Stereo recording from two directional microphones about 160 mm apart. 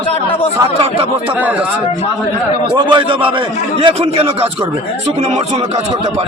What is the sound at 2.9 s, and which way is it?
Speech, 30° right (ahead or behind).